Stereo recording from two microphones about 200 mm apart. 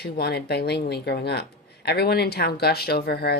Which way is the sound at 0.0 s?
55° left (ahead or behind).